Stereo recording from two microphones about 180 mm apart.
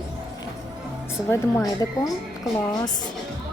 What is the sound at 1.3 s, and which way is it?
Speech, 15° left (ahead or behind).